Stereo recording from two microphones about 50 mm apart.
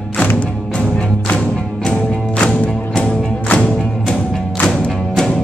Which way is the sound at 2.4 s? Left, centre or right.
Centre.